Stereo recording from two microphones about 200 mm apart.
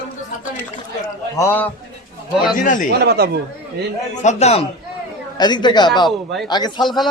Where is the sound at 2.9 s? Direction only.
55° right (ahead or behind).